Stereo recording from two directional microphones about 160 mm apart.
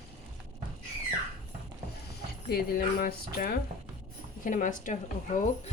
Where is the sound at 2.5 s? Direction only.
70° left (ahead or behind).